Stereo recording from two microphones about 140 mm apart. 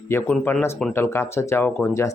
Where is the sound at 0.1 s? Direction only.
15° left (ahead or behind).